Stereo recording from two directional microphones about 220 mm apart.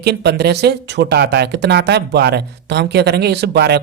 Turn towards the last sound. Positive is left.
turn(degrees=-50)  # may be behind; listen again after turning